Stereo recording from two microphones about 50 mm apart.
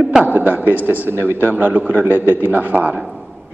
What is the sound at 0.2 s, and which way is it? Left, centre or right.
A man's voice, right.